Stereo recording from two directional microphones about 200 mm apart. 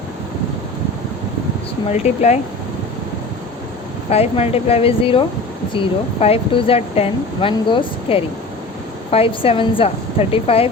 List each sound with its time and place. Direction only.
1.9 s speech: 35° left (ahead or behind)
4.1 s speech: 30° left (ahead or behind)